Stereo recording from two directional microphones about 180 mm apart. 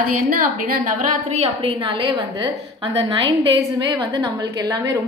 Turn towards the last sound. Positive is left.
turn(degrees=-20)  # may be behind; listen again after turning